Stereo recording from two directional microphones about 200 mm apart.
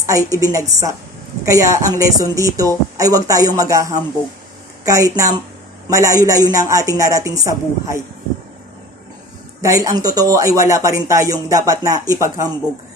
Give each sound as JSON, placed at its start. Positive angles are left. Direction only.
{"t": 0.3, "sound": "speech", "side_deg": -15}
{"t": 9.6, "sound": "speech", "side_deg": -15}